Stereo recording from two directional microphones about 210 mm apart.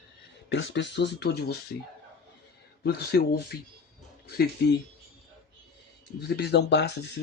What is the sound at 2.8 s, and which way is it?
Speech, 50° left (ahead or behind).